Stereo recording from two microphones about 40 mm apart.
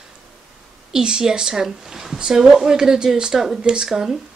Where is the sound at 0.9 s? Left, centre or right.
Centre.